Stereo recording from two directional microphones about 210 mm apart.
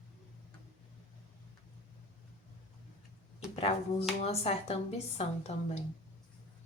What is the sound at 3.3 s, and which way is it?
A woman's voice, 30° left (ahead or behind).